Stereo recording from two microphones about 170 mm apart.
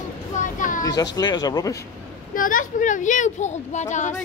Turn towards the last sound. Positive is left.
turn(degrees=45)  # may be behind; listen again after turning